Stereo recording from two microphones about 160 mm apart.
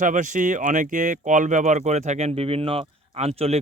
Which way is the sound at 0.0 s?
50° right (ahead or behind).